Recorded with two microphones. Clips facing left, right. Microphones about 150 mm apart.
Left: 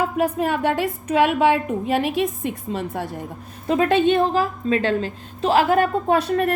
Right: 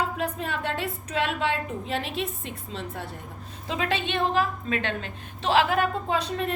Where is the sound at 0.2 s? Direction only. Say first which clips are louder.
Left 9 dB; 60° left (ahead or behind).